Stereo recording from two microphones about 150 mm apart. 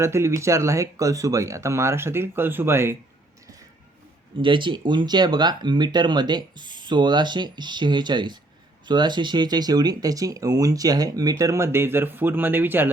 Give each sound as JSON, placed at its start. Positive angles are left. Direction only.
{"t": 0.0, "sound": "speech", "side_deg": -20}
{"t": 4.4, "sound": "speech", "side_deg": -35}